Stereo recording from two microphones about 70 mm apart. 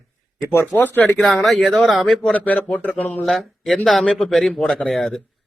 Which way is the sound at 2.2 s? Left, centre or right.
Left.